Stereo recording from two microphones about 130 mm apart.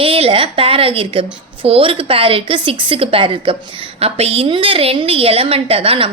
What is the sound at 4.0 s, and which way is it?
A woman's voice, 50° right (ahead or behind).